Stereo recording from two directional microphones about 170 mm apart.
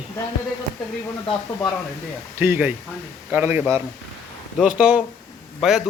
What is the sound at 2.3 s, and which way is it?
A man's voice, 15° right (ahead or behind).